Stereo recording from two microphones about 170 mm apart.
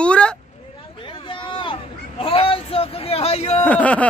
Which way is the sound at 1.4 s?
30° left (ahead or behind).